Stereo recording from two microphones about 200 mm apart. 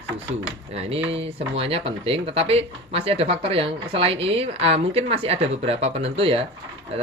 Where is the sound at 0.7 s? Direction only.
30° right (ahead or behind).